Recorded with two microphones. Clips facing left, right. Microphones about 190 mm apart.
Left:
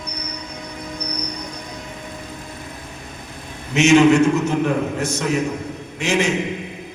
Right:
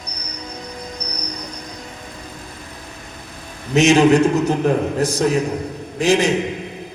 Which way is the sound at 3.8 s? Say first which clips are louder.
Even; 35° right (ahead or behind).